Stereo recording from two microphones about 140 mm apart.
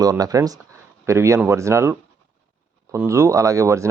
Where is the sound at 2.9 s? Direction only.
20° right (ahead or behind).